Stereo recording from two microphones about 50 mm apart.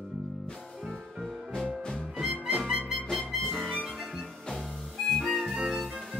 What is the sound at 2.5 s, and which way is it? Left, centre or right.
Music, centre.